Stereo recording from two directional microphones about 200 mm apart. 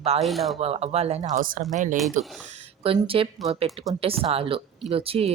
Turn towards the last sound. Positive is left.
turn(degrees=-30)  # may be behind; listen again after turning